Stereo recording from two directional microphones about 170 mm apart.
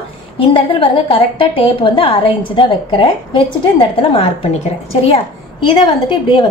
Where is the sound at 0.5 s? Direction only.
30° left (ahead or behind).